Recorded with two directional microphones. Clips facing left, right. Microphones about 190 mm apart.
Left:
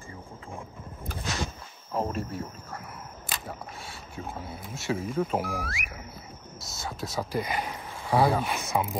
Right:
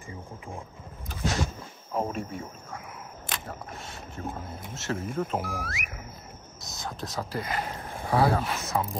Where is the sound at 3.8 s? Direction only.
10° left (ahead or behind).